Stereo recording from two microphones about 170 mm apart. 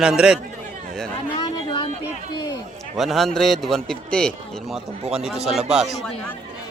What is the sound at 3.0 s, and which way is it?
Speech, centre (ahead or behind).